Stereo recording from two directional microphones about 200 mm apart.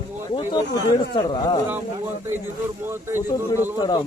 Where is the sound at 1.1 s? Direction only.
20° left (ahead or behind).